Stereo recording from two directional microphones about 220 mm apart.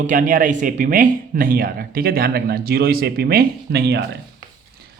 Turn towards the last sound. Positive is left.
turn(degrees=-50)  # may be behind; listen again after turning